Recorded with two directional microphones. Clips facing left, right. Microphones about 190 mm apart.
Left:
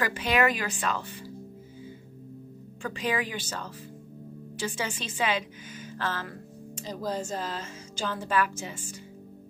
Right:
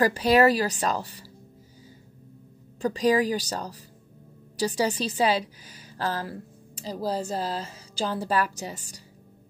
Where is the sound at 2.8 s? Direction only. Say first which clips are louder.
Right 8 dB; 40° right (ahead or behind).